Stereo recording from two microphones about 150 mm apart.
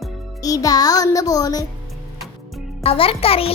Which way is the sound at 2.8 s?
40° left (ahead or behind).